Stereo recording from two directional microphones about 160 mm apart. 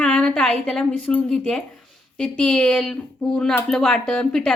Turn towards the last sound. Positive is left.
turn(degrees=5)  # may be behind; listen again after turning